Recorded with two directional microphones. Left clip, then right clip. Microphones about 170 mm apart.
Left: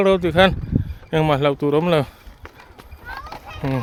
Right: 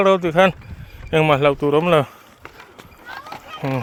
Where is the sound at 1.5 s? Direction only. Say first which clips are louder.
Right 2 dB; 30° left (ahead or behind).